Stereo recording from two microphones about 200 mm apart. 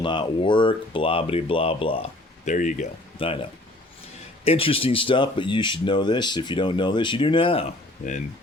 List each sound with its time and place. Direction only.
0.0 s speech: 25° left (ahead or behind); by 2.8 s 40° left (ahead or behind)
3.2 s speech: 25° left (ahead or behind)
4.4 s speech: 30° left (ahead or behind)